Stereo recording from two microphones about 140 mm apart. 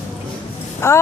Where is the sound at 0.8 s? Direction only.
20° left (ahead or behind).